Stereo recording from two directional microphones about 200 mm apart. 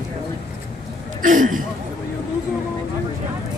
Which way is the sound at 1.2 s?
40° right (ahead or behind).